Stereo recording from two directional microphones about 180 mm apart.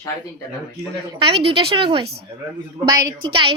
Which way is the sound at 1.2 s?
30° right (ahead or behind).